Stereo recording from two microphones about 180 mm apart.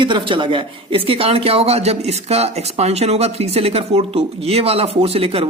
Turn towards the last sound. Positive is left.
turn(degrees=-35)  # may be behind; listen again after turning